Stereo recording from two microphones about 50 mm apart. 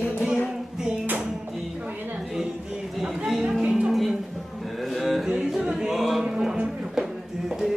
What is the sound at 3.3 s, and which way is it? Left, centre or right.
Music, centre.